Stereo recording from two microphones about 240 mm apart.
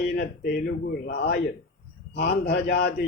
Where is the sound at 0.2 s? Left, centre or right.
Left.